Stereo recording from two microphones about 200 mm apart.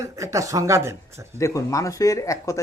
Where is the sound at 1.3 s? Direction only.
15° left (ahead or behind).